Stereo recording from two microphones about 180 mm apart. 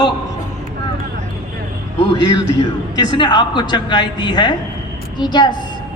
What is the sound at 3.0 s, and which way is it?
Speech, 25° left (ahead or behind).